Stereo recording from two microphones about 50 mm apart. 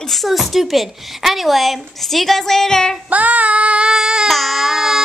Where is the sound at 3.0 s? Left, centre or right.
Right.